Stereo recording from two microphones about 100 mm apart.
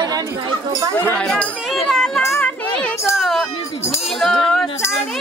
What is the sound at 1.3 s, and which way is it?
Chatter, 5° left (ahead or behind).